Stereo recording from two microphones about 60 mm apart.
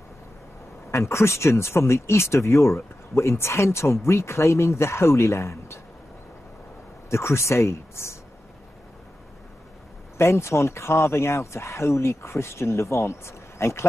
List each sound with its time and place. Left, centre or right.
0.9 s speech: left
7.1 s speech: left
10.1 s speech: left